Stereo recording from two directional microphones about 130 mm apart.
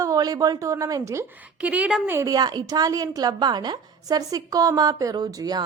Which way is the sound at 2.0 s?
25° right (ahead or behind).